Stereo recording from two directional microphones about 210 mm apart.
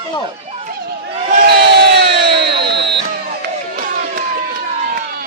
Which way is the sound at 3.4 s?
45° right (ahead or behind).